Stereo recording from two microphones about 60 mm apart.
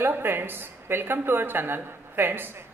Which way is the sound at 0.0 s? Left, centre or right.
Right.